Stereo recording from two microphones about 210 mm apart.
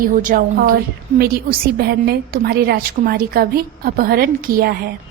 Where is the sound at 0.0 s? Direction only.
40° right (ahead or behind).